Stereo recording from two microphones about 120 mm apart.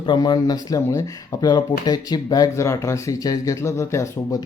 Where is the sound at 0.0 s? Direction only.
40° left (ahead or behind).